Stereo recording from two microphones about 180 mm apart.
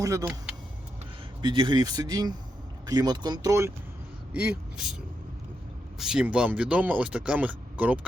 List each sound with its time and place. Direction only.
0.0 s speech: 20° right (ahead or behind)
1.4 s speech: 25° right (ahead or behind)
6.0 s speech: 5° right (ahead or behind)